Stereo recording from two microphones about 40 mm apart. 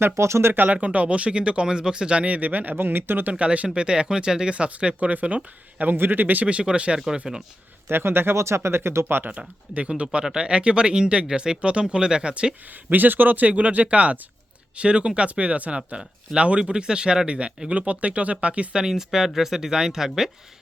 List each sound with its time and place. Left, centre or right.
0.0 s speech: right
0.9 s speech: right
2.7 s speech: right
3.3 s speech: right
3.8 s speech: right
4.9 s speech: right
5.8 s a man's voice: right
6.5 s speech: right
6.9 s speech: centre
7.9 s speech: right
10.0 s speech: right
12.9 s a man's voice: right
13.5 s speech: right
18.8 s speech: centre